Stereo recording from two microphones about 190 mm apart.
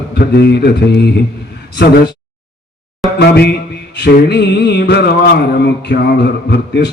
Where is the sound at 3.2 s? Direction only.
60° left (ahead or behind).